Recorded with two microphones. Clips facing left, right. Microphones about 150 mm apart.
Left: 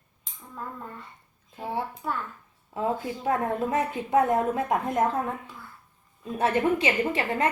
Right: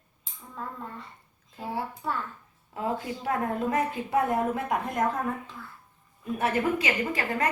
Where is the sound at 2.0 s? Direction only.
Centre (ahead or behind).